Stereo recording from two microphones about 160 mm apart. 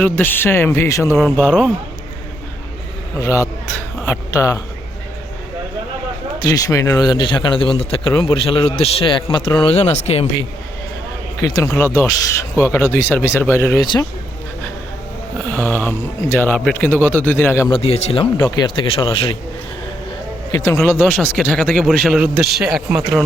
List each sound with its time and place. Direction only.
0.0 s speech: 10° left (ahead or behind)
3.2 s speech: 20° left (ahead or behind)
6.4 s a man's voice: 20° left (ahead or behind); by 10.2 s 40° left (ahead or behind)
11.3 s speech: 20° left (ahead or behind)
13.8 s speech: 30° left (ahead or behind)
15.4 s speech: 10° left (ahead or behind)
17.7 s a man's voice: 35° left (ahead or behind)
20.7 s speech: 15° left (ahead or behind)